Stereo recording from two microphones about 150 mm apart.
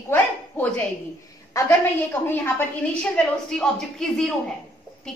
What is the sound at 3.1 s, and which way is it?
A woman's voice, 5° left (ahead or behind).